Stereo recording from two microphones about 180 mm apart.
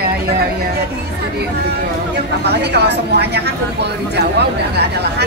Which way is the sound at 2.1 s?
65° right (ahead or behind).